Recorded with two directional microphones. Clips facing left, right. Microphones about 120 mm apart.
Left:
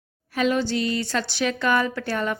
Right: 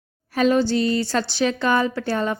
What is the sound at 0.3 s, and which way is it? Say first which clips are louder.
A woman's voice: right 4 dB; 35° right (ahead or behind).